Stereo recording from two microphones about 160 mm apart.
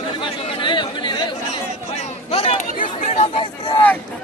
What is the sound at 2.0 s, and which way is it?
Speech, 40° left (ahead or behind).